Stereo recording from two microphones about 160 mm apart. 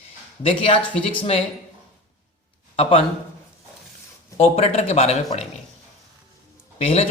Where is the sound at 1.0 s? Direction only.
35° left (ahead or behind).